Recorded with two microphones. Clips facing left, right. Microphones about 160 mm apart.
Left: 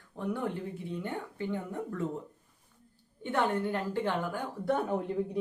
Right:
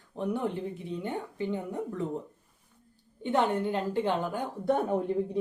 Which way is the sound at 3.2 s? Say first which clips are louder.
Right 3 dB; 20° right (ahead or behind).